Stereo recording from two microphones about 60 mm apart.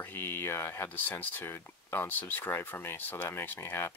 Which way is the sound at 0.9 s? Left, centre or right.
Left.